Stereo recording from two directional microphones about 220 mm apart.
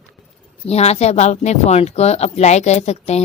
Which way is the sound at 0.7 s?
30° left (ahead or behind).